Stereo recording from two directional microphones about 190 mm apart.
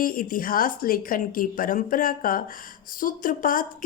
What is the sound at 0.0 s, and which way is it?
Speech, 50° left (ahead or behind).